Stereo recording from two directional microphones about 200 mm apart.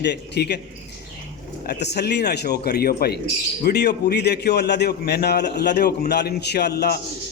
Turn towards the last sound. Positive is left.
turn(degrees=55)  # may be behind; listen again after turning